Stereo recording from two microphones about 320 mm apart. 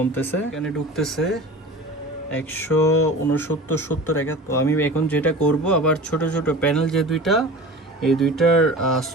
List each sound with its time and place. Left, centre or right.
0.1 s a man's voice: centre